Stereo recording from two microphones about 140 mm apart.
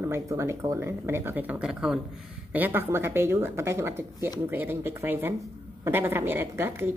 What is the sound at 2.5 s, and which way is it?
Speech, 15° right (ahead or behind).